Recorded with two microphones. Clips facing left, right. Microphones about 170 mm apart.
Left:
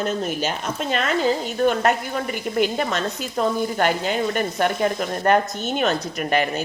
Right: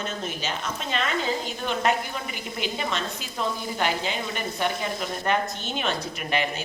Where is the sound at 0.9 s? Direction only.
45° left (ahead or behind).